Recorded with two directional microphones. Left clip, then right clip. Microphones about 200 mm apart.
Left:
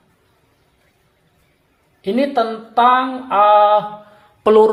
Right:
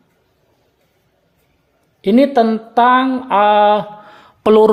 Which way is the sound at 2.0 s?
55° right (ahead or behind).